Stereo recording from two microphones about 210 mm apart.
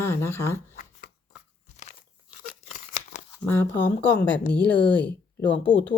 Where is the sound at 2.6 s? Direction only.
35° left (ahead or behind).